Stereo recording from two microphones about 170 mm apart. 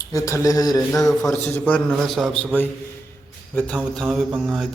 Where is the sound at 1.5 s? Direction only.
10° left (ahead or behind).